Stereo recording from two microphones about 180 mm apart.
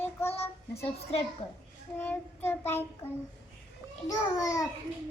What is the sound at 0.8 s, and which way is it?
Speech, 35° left (ahead or behind).